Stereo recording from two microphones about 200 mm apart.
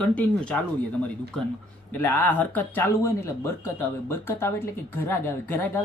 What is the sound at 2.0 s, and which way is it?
Speech, 10° left (ahead or behind).